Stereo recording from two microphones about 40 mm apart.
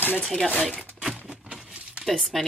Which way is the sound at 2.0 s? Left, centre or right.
Centre.